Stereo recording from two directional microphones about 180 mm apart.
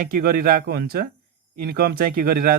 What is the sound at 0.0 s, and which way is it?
A man's voice, 55° right (ahead or behind).